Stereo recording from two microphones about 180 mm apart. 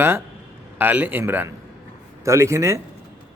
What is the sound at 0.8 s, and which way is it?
A man's voice, 10° right (ahead or behind).